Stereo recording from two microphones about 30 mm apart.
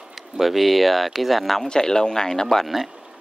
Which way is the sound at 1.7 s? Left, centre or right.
Left.